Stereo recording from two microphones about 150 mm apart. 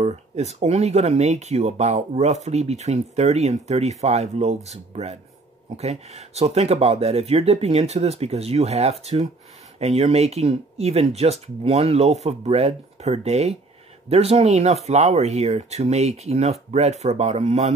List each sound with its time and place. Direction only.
0.0 s speech: 45° right (ahead or behind)